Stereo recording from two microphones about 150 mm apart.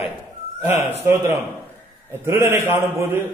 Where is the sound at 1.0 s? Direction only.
15° right (ahead or behind).